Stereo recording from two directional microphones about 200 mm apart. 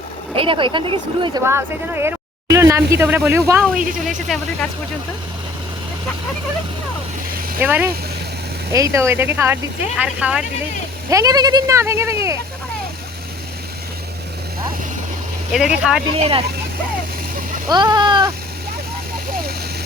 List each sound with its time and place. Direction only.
0.3 s speech: 25° right (ahead or behind)
1.5 s speech: 10° right (ahead or behind)
7.6 s speech: 10° right (ahead or behind)
11.1 s speech: 15° right (ahead or behind)
15.5 s speech: 5° right (ahead or behind)
17.7 s speech: 20° right (ahead or behind)